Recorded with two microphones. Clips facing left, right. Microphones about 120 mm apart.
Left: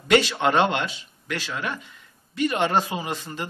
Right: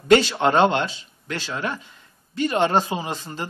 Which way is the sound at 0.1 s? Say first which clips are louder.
Right 3 dB; 30° right (ahead or behind).